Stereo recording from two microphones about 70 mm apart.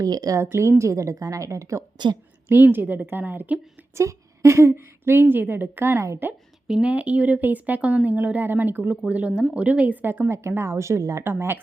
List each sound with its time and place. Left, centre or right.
0.0 s speech: right
0.6 s a woman's voice: right
2.7 s speech: right
3.9 s a woman's voice: right
6.8 s a woman's voice: centre; by 11.2 s right
11.2 s a woman's voice: right